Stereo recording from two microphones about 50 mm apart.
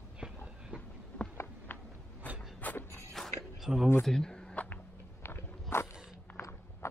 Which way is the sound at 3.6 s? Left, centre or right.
Centre.